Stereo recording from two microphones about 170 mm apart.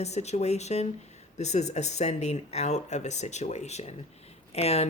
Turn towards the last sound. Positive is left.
turn(degrees=35)  # may be behind; listen again after turning